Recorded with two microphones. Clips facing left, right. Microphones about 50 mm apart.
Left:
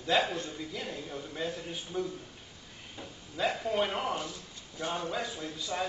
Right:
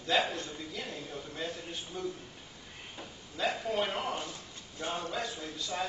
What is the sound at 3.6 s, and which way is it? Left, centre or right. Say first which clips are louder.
Speech: left 2 dB; centre.